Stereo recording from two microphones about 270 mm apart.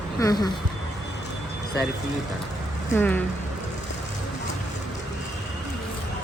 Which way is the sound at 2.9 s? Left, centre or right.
Centre.